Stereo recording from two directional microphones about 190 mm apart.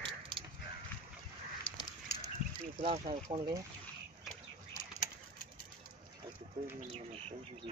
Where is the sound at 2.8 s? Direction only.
35° right (ahead or behind).